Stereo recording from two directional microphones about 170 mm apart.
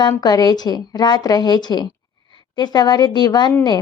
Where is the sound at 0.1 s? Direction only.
25° left (ahead or behind).